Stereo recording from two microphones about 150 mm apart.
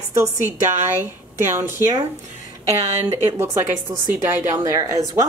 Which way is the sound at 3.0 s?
15° right (ahead or behind).